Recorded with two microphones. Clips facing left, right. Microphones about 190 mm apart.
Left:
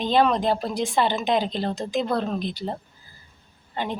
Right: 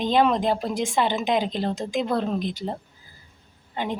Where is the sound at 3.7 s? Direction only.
15° right (ahead or behind).